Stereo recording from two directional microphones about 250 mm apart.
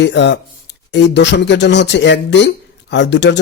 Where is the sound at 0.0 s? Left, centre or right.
Left.